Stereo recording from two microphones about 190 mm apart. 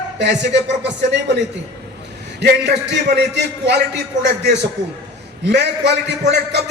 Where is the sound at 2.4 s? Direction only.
65° right (ahead or behind).